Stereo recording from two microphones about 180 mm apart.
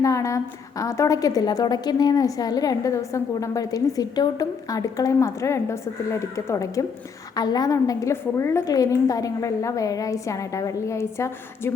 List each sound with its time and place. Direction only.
0.0 s a woman's voice: 15° left (ahead or behind)